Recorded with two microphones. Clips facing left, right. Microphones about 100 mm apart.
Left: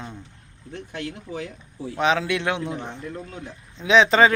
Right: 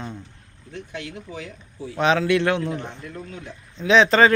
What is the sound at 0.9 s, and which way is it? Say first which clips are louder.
Speech: left 3 dB; 45° left (ahead or behind).